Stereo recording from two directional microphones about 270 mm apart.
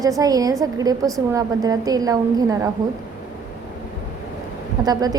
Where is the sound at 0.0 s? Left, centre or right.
Centre.